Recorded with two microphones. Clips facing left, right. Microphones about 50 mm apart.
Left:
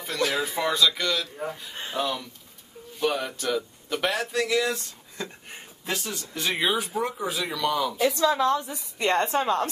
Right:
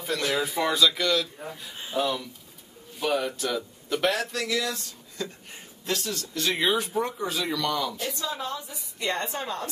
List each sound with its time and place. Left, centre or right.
0.3 s a man's voice: centre
4.4 s speech: centre
8.0 s a woman's voice: left
8.9 s a woman's voice: left